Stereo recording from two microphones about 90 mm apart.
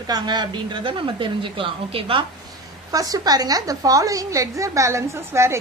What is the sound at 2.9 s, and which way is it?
A woman's voice, 40° right (ahead or behind).